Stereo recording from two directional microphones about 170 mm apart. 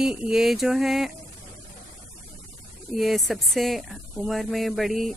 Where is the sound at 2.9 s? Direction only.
Centre (ahead or behind).